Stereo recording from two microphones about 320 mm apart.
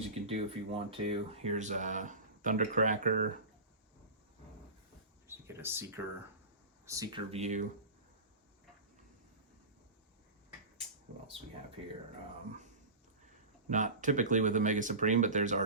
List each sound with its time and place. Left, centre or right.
0.1 s speech: centre
5.3 s speech: centre
13.7 s speech: right